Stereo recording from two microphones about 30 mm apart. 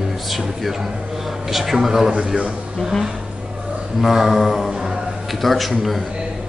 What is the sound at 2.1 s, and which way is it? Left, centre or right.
Speech, right.